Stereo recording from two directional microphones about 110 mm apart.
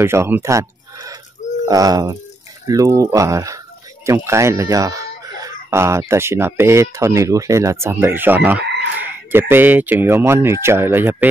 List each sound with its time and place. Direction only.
0.0 s speech: 20° right (ahead or behind)